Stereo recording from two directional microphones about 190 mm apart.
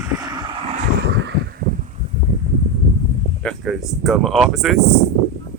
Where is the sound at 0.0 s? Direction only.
20° right (ahead or behind).